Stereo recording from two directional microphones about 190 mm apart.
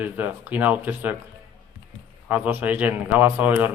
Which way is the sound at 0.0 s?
10° right (ahead or behind).